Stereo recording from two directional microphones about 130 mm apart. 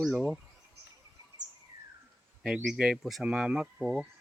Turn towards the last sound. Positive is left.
turn(degrees=-5)  # may be behind; listen again after turning